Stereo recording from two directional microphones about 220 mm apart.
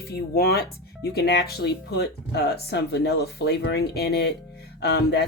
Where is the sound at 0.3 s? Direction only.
45° left (ahead or behind).